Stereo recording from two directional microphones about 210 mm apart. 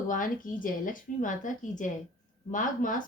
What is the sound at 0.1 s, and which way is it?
Speech, 40° left (ahead or behind).